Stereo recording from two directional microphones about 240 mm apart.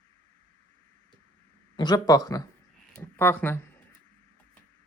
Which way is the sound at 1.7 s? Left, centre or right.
Centre.